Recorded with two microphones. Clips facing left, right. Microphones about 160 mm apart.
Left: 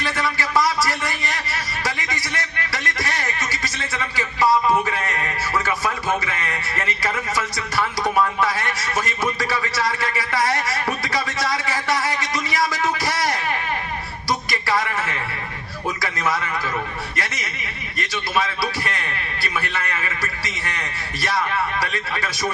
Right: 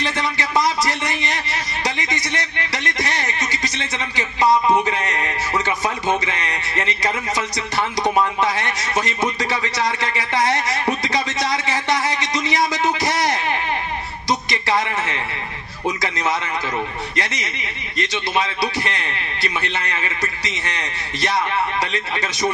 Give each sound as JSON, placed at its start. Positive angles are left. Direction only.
{"t": 0.0, "sound": "a man's voice", "side_deg": -20}
{"t": 14.3, "sound": "a sound", "side_deg": -20}
{"t": 15.9, "sound": "a man's voice", "side_deg": -20}